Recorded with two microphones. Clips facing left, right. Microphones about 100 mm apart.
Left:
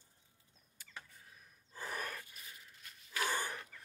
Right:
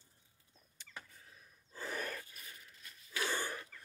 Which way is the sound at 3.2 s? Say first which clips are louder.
Left 1 dB; 15° left (ahead or behind).